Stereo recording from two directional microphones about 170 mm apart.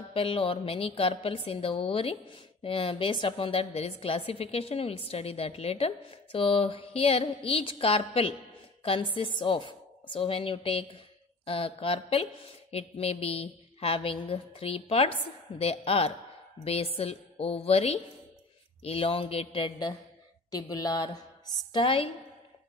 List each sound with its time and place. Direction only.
0.1 s a woman's voice: 35° left (ahead or behind)